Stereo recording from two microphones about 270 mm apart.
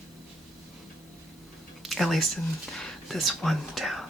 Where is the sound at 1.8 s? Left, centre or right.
Centre.